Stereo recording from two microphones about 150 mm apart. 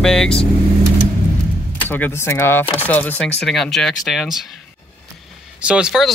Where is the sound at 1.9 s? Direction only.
15° left (ahead or behind); by 4.3 s centre (ahead or behind).